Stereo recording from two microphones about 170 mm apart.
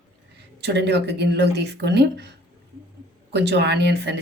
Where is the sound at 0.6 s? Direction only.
90° right.